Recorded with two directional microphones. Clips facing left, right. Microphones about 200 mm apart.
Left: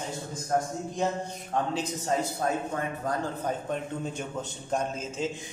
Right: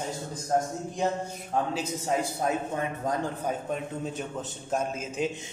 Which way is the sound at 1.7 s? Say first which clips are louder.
Even; 10° right (ahead or behind).